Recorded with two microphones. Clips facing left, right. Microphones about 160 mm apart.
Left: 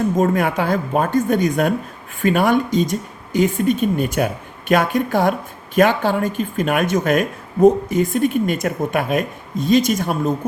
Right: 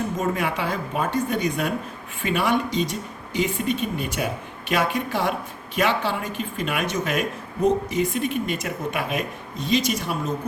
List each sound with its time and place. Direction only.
0.2 s speech: 45° left (ahead or behind)